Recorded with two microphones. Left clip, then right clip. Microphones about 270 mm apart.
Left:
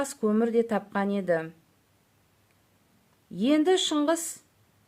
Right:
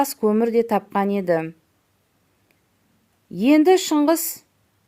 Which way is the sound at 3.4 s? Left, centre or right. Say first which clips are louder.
Right 8 dB; centre.